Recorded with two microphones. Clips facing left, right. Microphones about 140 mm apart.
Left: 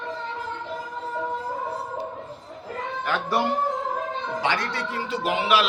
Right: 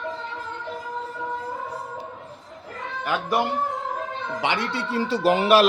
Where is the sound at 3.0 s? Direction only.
10° right (ahead or behind).